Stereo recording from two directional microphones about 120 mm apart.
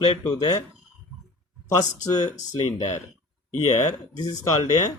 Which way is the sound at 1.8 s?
30° left (ahead or behind).